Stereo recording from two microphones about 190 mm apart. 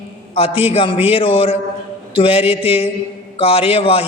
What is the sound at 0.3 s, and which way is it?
A woman's voice, 30° left (ahead or behind).